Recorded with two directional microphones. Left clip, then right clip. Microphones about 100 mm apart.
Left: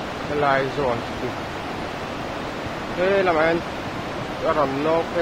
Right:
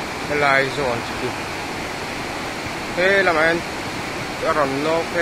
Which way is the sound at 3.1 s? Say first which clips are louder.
Right 2 dB; 15° right (ahead or behind).